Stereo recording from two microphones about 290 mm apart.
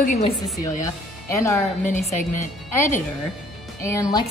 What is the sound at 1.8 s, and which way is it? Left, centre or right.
Speech, left.